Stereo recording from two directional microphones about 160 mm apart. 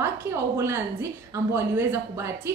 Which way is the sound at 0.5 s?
15° right (ahead or behind).